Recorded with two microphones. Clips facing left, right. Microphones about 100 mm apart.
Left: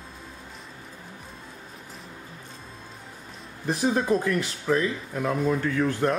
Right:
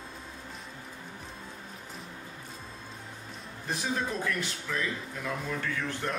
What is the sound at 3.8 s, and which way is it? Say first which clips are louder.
Speech: left 9 dB; 40° left (ahead or behind).